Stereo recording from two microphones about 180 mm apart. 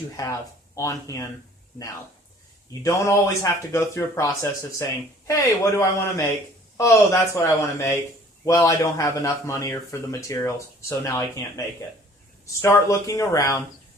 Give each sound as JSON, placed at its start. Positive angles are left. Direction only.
{"t": 0.2, "sound": "speech", "side_deg": 20}
{"t": 2.8, "sound": "speech", "side_deg": 15}
{"t": 12.6, "sound": "speech", "side_deg": 15}